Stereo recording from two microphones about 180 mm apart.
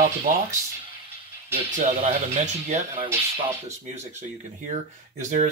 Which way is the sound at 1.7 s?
40° right (ahead or behind).